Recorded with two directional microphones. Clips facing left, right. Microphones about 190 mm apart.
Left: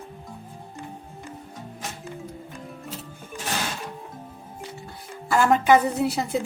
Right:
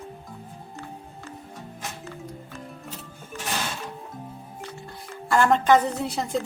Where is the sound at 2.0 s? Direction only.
15° left (ahead or behind).